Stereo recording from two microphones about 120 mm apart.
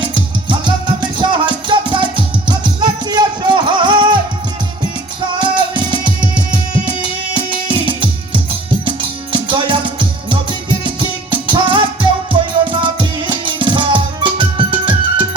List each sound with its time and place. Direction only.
0.0 s music: 40° right (ahead or behind)
5.4 s music: 40° right (ahead or behind)